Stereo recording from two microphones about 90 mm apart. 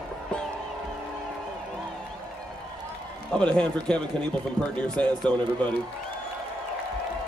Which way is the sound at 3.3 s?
10° left (ahead or behind).